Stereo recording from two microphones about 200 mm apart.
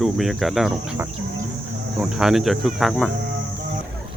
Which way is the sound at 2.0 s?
Centre (ahead or behind).